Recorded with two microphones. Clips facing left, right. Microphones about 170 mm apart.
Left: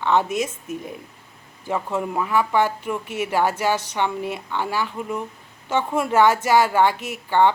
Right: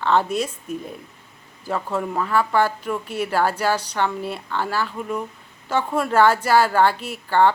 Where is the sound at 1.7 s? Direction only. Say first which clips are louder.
Even; 15° left (ahead or behind).